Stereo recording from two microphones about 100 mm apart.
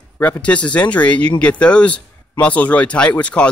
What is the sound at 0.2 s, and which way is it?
Speech, 15° left (ahead or behind).